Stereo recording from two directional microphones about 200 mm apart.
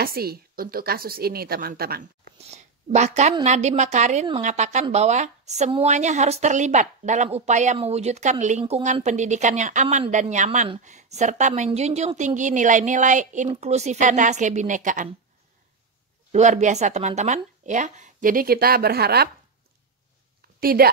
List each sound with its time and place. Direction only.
0.0 s a woman's voice: 50° right (ahead or behind)
2.3 s a woman's voice: 35° right (ahead or behind)
16.3 s a woman's voice: 35° right (ahead or behind); by 19.2 s 50° right (ahead or behind)
20.6 s a woman's voice: 50° right (ahead or behind)